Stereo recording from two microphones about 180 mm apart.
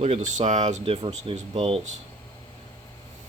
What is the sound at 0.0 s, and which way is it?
Speech, 35° right (ahead or behind).